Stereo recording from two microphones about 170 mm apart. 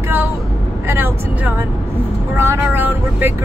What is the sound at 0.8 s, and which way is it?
Speech, 10° right (ahead or behind).